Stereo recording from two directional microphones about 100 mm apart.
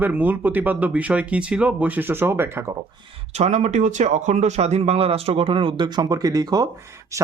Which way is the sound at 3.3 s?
90° right.